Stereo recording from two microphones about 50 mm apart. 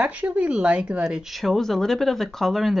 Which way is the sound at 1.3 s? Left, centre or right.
Centre.